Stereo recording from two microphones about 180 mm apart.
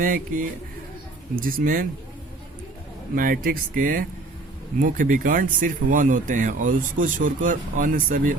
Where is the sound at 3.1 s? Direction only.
55° right (ahead or behind).